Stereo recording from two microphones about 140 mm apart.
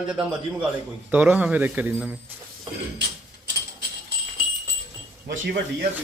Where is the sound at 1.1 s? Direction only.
10° right (ahead or behind).